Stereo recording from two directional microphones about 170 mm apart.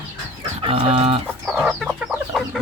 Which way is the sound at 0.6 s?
35° right (ahead or behind).